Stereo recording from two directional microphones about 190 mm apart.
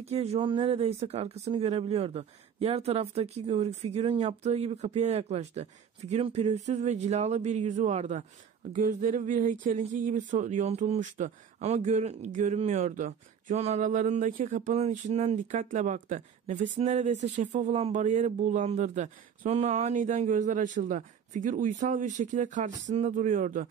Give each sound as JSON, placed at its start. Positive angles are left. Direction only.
{"t": 0.0, "sound": "speech", "side_deg": -35}